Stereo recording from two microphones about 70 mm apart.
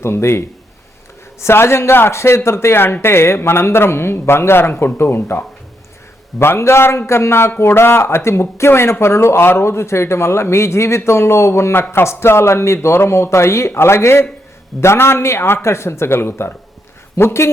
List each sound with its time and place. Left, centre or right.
0.0 s speech: left
6.4 s speech: left